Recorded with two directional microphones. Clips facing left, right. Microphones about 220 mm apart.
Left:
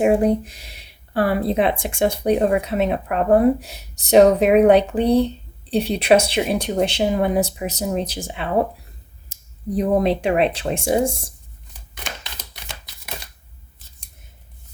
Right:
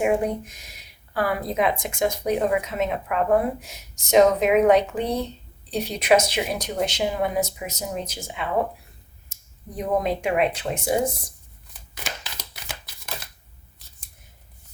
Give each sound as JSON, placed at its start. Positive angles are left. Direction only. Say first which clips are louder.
{"t": 0.0, "sound": "speech", "louder": "left 6 dB", "side_deg": 35}
{"t": 9.3, "sound": "a sound", "louder": "left 12 dB", "side_deg": 35}
{"t": 10.2, "sound": "speech", "louder": "left 4 dB", "side_deg": 30}